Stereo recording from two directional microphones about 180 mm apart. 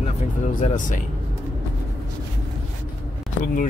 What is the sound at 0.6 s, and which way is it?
Speech, 45° left (ahead or behind).